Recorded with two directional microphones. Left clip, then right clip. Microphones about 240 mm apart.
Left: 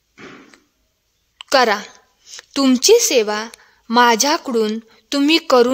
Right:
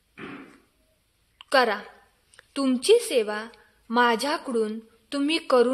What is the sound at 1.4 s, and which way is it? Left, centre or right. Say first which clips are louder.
A woman's voice: left 7 dB; left.